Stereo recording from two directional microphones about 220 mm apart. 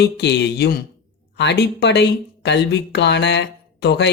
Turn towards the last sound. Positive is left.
turn(degrees=50)  # may be behind; listen again after turning